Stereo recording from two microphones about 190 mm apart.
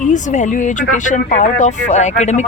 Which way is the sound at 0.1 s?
40° left (ahead or behind).